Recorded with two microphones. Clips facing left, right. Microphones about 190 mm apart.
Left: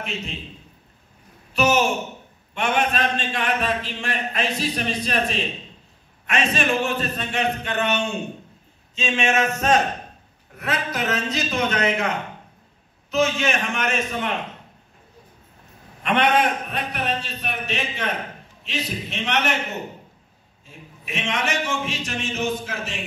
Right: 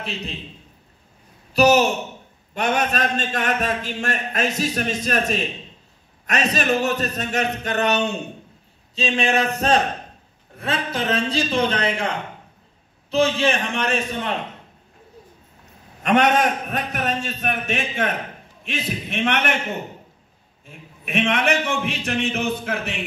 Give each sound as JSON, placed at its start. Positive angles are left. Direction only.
{"t": 1.5, "sound": "a man's voice", "side_deg": -35}
{"t": 13.1, "sound": "speech", "side_deg": -30}
{"t": 16.0, "sound": "a man's voice", "side_deg": -45}
{"t": 21.0, "sound": "speech", "side_deg": -55}